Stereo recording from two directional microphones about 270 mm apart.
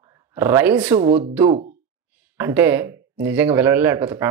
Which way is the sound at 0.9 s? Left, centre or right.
Right.